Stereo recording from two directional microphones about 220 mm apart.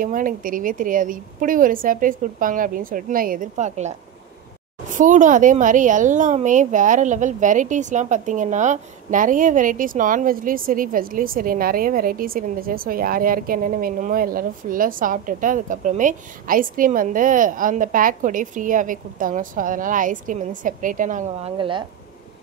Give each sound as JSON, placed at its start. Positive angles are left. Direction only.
{"t": 0.0, "sound": "speech", "side_deg": -40}